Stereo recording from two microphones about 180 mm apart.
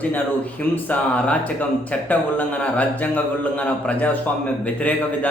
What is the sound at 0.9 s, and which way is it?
Speech, 5° left (ahead or behind).